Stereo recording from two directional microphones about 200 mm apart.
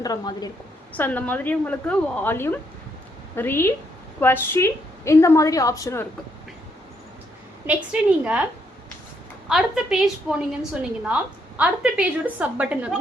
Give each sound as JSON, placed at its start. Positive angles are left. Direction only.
{"t": 0.0, "sound": "a woman's voice", "side_deg": 20}
{"t": 0.9, "sound": "a woman's voice", "side_deg": 10}
{"t": 7.9, "sound": "a woman's voice", "side_deg": -5}
{"t": 9.5, "sound": "a woman's voice", "side_deg": 0}